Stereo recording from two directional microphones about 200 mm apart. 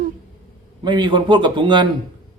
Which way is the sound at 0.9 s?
25° right (ahead or behind).